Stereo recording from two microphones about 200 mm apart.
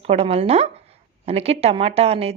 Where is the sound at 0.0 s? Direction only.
30° right (ahead or behind).